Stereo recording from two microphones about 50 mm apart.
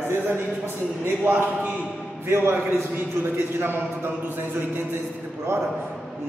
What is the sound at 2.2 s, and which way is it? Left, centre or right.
Speech, right.